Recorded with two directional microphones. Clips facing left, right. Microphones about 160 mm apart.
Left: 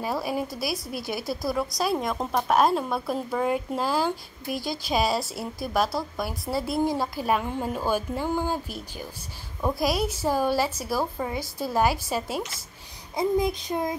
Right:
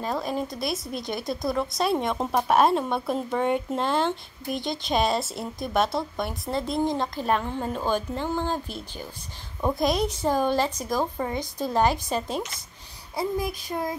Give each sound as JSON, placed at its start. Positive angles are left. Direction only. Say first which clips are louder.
{"t": 0.0, "sound": "a woman's voice", "louder": "even", "side_deg": 10}
{"t": 9.6, "sound": "a woman's voice", "louder": "right 1 dB", "side_deg": 0}
{"t": 13.1, "sound": "child singing", "louder": "left 4 dB", "side_deg": 20}